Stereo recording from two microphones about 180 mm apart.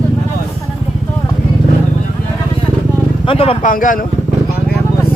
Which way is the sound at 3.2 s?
30° left (ahead or behind).